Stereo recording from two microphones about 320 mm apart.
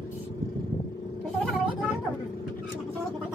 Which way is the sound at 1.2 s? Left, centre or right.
Centre.